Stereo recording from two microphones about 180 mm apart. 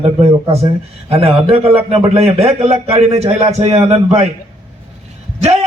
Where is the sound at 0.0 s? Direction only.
35° right (ahead or behind).